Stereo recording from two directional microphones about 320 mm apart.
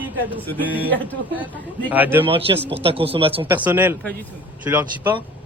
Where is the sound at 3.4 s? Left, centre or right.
Centre.